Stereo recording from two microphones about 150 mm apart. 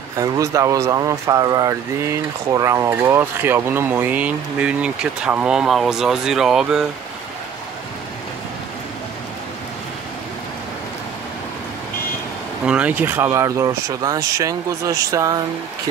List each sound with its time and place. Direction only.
0.2 s speech: 20° right (ahead or behind); by 6.9 s 5° right (ahead or behind)
12.6 s speech: 10° right (ahead or behind)